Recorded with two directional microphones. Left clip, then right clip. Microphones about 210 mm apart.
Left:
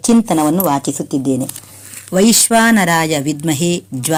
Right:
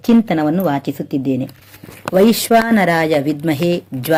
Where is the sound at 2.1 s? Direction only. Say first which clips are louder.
Even; 50° left (ahead or behind).